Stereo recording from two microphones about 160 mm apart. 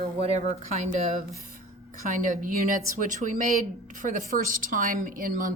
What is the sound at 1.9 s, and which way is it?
A woman's voice, 60° right (ahead or behind).